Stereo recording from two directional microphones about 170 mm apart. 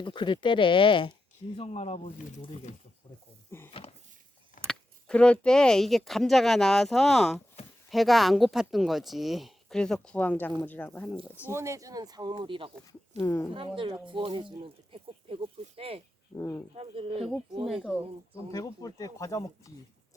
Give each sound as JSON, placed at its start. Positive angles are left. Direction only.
{"t": 0.0, "sound": "speech", "side_deg": 30}
{"t": 3.7, "sound": "a sound", "side_deg": 35}
{"t": 4.6, "sound": "speech", "side_deg": 5}
{"t": 11.5, "sound": "speech", "side_deg": -15}
{"t": 13.1, "sound": "speech", "side_deg": 15}
{"t": 13.5, "sound": "speech", "side_deg": -30}
{"t": 16.3, "sound": "speech", "side_deg": 15}
{"t": 16.7, "sound": "speech", "side_deg": -35}
{"t": 17.7, "sound": "speech", "side_deg": 0}
{"t": 18.5, "sound": "speech", "side_deg": 20}